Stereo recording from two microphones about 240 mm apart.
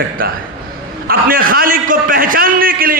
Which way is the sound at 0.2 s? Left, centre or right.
Right.